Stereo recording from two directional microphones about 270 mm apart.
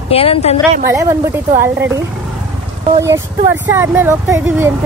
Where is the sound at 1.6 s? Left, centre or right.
Centre.